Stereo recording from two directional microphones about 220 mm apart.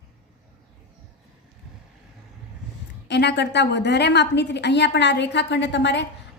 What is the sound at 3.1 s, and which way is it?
A woman's voice, 50° left (ahead or behind).